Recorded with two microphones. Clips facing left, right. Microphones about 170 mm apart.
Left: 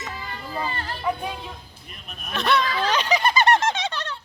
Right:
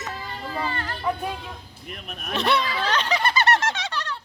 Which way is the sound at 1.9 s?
60° right (ahead or behind).